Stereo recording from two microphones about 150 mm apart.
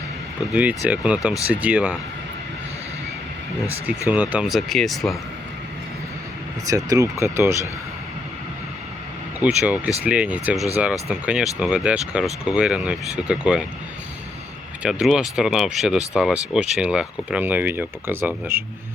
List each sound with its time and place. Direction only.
0.5 s speech: 10° right (ahead or behind)
4.1 s speech: 10° right (ahead or behind)
6.7 s speech: 20° right (ahead or behind)
9.4 s speech: 10° right (ahead or behind)
14.8 s speech: 5° right (ahead or behind)